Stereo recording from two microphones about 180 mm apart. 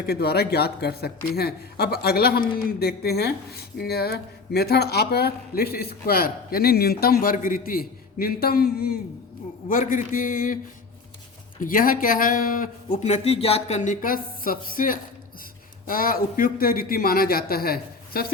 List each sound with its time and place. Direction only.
0.0 s speech: 60° left (ahead or behind)
11.6 s speech: 50° left (ahead or behind)